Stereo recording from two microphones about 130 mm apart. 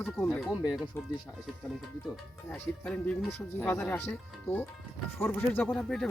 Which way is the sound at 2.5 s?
10° left (ahead or behind).